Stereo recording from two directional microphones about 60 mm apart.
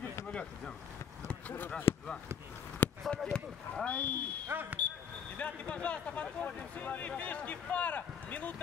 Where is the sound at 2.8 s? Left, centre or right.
Left.